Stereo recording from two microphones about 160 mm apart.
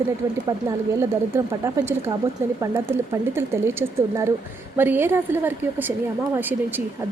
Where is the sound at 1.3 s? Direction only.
20° right (ahead or behind).